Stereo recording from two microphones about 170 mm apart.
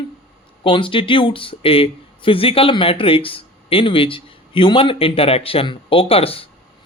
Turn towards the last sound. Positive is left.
turn(degrees=35)  # may be behind; listen again after turning